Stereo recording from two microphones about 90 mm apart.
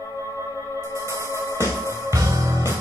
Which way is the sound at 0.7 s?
30° right (ahead or behind).